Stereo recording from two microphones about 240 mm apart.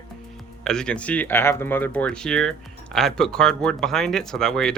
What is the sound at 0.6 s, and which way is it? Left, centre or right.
Speech, centre.